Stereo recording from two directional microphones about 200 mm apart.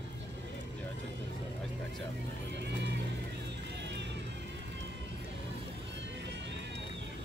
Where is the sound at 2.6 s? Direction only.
60° right (ahead or behind).